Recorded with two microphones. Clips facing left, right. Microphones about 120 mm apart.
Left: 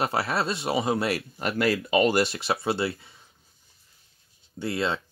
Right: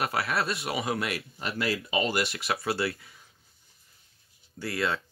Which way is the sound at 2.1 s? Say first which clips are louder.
Left 5 dB; 30° left (ahead or behind).